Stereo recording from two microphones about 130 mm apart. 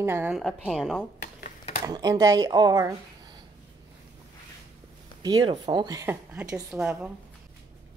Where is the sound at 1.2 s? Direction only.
80° left.